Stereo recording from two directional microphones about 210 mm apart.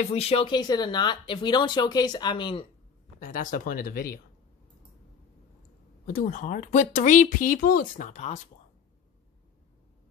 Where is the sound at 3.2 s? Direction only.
40° left (ahead or behind).